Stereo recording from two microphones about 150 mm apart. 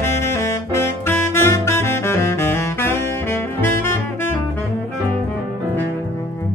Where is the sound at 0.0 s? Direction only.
15° left (ahead or behind).